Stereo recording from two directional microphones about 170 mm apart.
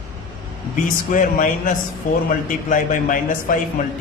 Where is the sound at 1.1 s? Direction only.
50° left (ahead or behind).